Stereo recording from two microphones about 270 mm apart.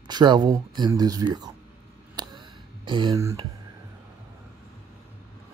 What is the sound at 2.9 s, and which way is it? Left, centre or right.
Speech, centre.